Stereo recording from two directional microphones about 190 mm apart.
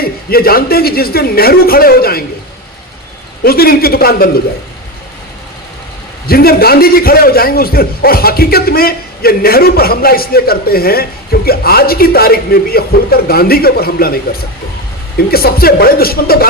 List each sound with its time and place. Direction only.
0.0 s a man's voice: 55° left (ahead or behind)
3.4 s a man's voice: 50° left (ahead or behind)
6.2 s a man's voice: 50° left (ahead or behind)
15.3 s a man's voice: 55° left (ahead or behind)